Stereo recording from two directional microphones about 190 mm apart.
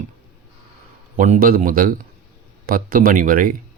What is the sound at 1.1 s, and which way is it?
Speech, 40° right (ahead or behind).